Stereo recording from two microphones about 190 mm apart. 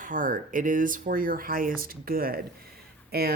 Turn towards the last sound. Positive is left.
turn(degrees=-55)  # may be behind; listen again after turning